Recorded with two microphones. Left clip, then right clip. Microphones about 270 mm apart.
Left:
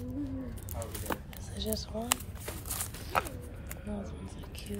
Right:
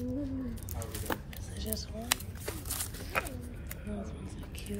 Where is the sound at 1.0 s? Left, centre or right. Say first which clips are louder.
Right 2 dB; centre.